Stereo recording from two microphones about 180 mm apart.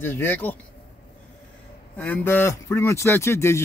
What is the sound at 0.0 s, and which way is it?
Speech, 10° left (ahead or behind).